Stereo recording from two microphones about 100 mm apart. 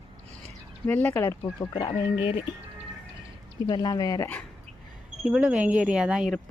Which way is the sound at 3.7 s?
45° left (ahead or behind).